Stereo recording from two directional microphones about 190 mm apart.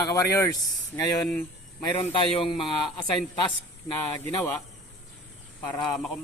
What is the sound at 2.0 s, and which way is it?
Speech, 30° left (ahead or behind).